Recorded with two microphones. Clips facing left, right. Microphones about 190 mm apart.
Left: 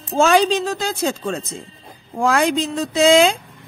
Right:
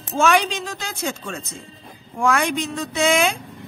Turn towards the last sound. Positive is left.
turn(degrees=30)  # may be behind; listen again after turning